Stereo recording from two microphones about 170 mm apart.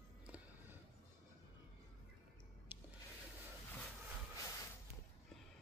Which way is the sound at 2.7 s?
10° right (ahead or behind).